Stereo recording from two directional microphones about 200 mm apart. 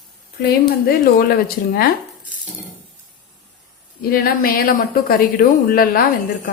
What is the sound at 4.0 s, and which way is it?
Speech, 50° left (ahead or behind).